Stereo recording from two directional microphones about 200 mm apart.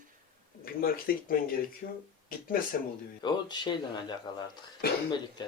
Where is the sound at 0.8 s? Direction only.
45° left (ahead or behind).